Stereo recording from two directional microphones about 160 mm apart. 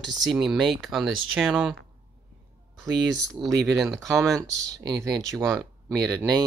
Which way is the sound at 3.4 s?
30° right (ahead or behind).